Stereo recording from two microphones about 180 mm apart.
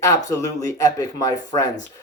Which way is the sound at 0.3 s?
20° left (ahead or behind).